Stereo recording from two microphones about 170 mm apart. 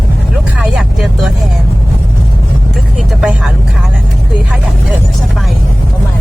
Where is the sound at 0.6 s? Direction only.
5° right (ahead or behind).